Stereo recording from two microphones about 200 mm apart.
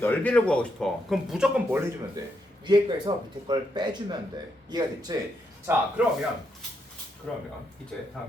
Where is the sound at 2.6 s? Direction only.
20° right (ahead or behind).